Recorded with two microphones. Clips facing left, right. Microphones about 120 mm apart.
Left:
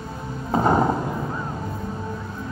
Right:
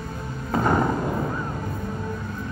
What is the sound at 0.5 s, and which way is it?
Music, 25° left (ahead or behind).